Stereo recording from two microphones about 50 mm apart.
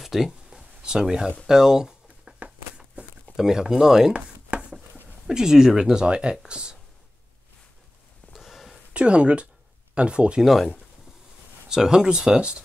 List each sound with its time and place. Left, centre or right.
0.0 s a sound: centre; by 2.5 s right
3.3 s speech: centre
4.1 s chopping: right
5.3 s speech: centre
8.3 s sniff: centre
8.9 s speech: right
10.4 s speech: centre
11.7 s speech: centre